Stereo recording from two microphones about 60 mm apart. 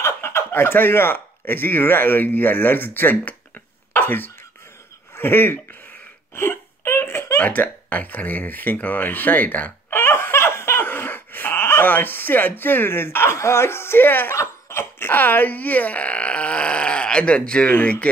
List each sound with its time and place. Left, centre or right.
0.0 s speech: left
3.9 s cough: left
5.1 s speech: left
6.3 s wail: left
7.4 s speech: left
9.9 s laughter: left
14.3 s speech: left